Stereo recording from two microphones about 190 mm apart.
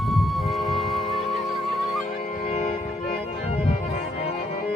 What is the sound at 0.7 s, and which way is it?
Music, centre (ahead or behind).